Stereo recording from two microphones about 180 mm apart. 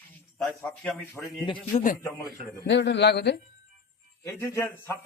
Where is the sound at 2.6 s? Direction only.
75° left (ahead or behind).